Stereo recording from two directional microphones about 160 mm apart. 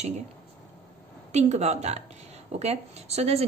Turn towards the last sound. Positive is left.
turn(degrees=-40)  # may be behind; listen again after turning